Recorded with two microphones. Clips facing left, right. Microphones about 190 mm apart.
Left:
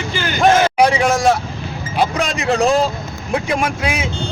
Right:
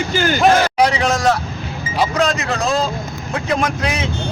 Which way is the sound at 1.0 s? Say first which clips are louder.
Left 2 dB; 10° left (ahead or behind).